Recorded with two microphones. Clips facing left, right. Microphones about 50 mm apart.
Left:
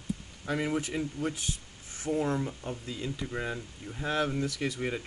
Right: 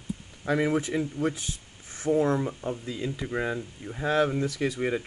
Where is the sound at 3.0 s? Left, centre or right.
Right.